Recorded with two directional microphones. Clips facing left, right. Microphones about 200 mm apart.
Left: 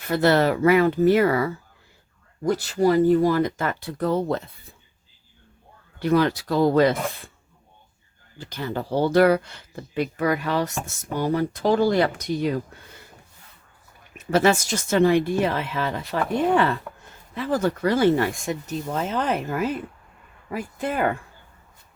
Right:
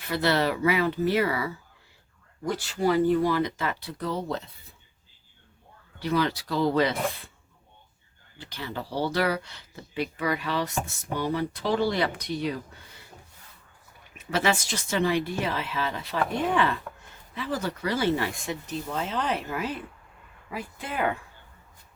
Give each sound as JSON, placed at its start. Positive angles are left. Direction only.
{"t": 0.0, "sound": "speech", "side_deg": 50}
{"t": 6.0, "sound": "speech", "side_deg": 50}
{"t": 8.4, "sound": "speech", "side_deg": 45}
{"t": 14.3, "sound": "speech", "side_deg": 45}